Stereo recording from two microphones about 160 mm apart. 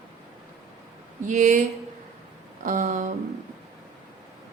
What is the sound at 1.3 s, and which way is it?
Speech, 50° right (ahead or behind).